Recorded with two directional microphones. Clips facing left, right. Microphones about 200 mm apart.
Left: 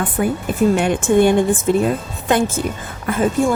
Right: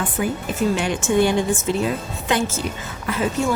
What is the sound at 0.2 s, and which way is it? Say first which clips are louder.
Speech: left 5 dB; 50° left (ahead or behind).